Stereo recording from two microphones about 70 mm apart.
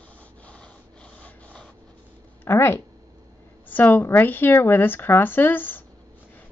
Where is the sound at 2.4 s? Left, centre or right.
Left.